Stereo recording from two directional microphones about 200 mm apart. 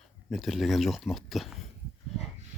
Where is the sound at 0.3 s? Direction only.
Centre (ahead or behind).